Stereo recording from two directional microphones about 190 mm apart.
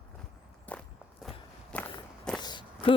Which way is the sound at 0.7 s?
10° left (ahead or behind).